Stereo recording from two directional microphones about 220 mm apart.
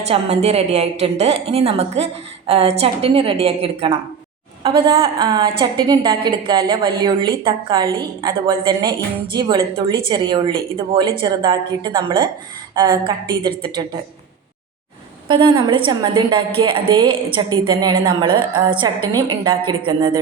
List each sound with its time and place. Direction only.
0.0 s a woman's voice: 30° right (ahead or behind)
15.3 s a woman's voice: 20° right (ahead or behind)